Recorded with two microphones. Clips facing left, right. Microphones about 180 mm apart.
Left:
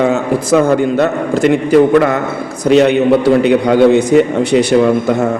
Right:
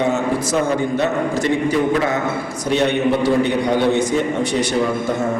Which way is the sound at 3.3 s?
75° left (ahead or behind).